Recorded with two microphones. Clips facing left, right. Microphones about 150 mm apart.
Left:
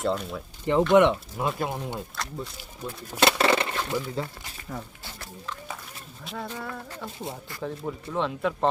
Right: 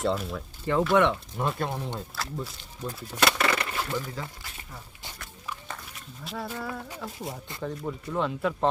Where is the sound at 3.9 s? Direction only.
10° left (ahead or behind).